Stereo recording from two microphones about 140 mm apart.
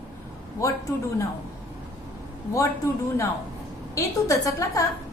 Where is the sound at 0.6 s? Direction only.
20° left (ahead or behind).